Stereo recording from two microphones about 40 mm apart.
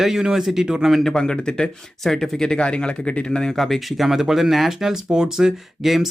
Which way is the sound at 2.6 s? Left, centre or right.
Left.